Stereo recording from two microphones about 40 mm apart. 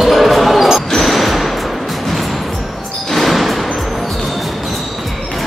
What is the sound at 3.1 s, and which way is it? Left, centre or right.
Music, centre.